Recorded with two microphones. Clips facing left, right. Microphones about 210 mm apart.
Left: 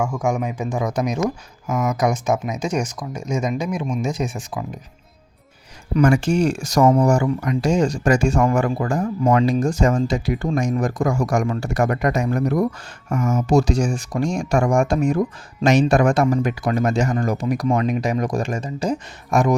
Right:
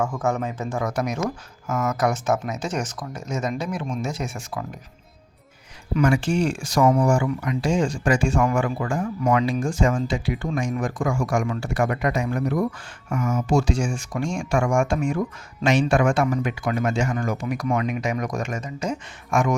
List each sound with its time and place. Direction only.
0.2 s speech: 15° left (ahead or behind)
5.9 s speech: 45° left (ahead or behind)